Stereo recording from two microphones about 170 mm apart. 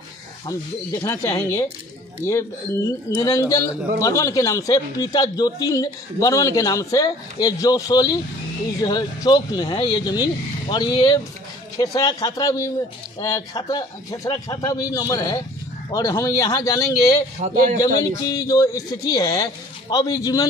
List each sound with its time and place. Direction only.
1.0 s a man's voice: 15° left (ahead or behind)
17.4 s a man's voice: 40° right (ahead or behind)
17.7 s a man's voice: 20° left (ahead or behind)